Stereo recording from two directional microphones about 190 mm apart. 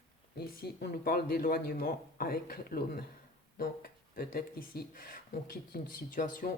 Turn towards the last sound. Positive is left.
turn(degrees=45)  # may be behind; listen again after turning